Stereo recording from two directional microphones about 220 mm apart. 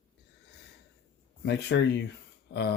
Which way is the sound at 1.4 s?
55° left (ahead or behind).